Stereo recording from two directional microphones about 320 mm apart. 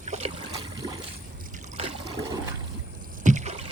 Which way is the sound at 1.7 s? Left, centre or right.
Centre.